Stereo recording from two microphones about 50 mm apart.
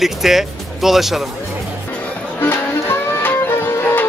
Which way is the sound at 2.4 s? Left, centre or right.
Left.